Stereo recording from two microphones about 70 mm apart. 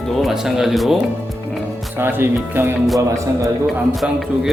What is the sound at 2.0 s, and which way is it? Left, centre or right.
Speech, right.